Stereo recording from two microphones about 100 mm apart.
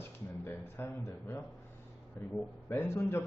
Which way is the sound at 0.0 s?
25° left (ahead or behind).